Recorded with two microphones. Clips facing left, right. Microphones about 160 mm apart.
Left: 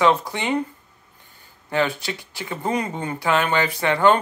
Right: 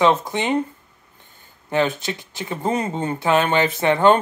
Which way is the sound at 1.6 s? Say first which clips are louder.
Right 2 dB; 20° right (ahead or behind).